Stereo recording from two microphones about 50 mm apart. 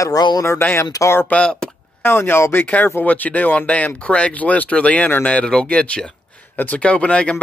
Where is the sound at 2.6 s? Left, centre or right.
Left.